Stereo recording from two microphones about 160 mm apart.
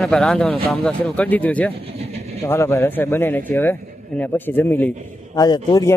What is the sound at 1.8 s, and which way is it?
Vehicle, 40° right (ahead or behind).